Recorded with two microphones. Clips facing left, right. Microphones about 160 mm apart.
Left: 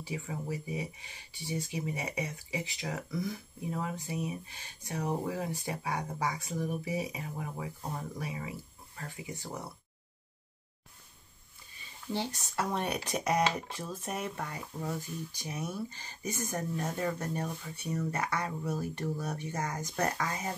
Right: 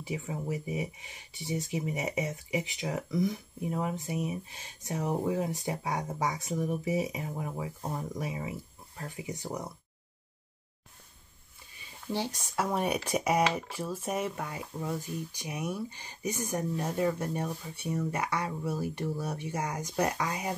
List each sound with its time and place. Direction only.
0.0 s speech: 20° right (ahead or behind)
12.1 s speech: 15° right (ahead or behind)